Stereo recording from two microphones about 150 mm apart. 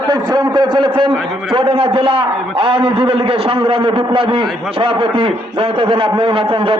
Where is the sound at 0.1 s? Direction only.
25° right (ahead or behind).